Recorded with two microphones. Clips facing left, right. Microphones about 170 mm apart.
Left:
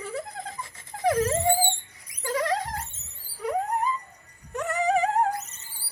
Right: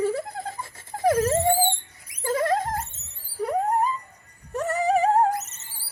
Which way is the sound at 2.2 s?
50° right (ahead or behind).